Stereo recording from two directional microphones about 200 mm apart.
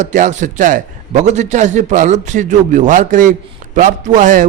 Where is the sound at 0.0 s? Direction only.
35° right (ahead or behind).